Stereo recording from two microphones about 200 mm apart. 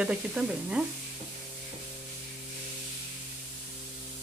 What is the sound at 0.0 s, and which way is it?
Sizzle, 5° right (ahead or behind).